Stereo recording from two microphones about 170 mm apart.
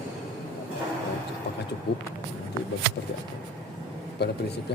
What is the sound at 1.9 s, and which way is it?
Speech, 80° left.